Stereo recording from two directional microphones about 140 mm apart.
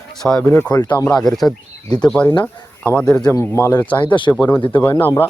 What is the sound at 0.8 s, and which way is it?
Speech, 30° left (ahead or behind).